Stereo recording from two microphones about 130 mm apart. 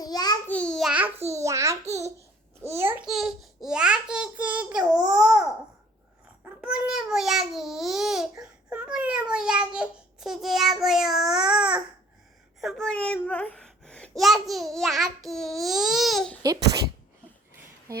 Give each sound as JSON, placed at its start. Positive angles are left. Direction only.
{"t": 0.0, "sound": "babbling", "side_deg": 30}
{"t": 0.4, "sound": "babbling", "side_deg": 10}
{"t": 0.9, "sound": "babbling", "side_deg": -10}
{"t": 1.4, "sound": "a child's voice", "side_deg": -25}
{"t": 2.9, "sound": "a child's voice", "side_deg": -5}
{"t": 6.6, "sound": "a child's voice", "side_deg": -10}